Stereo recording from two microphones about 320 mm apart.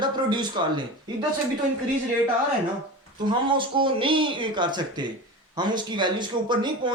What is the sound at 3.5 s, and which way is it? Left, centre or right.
Speech, centre.